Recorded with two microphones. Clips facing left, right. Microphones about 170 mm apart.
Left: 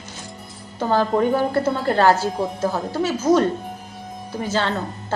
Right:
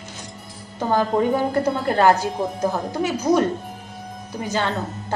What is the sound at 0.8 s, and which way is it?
A woman's voice, 15° right (ahead or behind).